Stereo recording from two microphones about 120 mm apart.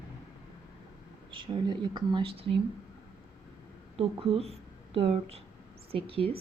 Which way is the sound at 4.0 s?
55° right (ahead or behind).